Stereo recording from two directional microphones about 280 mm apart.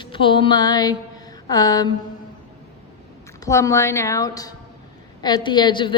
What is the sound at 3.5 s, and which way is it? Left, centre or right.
A woman's voice, centre.